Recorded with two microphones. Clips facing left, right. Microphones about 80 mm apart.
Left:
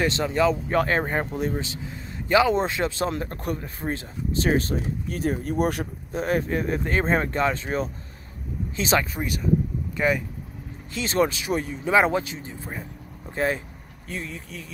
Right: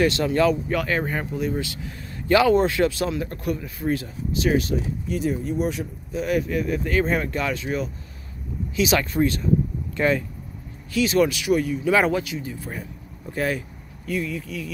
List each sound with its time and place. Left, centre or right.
0.0 s speech: left
0.7 s speech: left
1.6 s speech: left
3.1 s speech: left
6.1 s speech: left
9.9 s speech: centre
10.9 s speech: left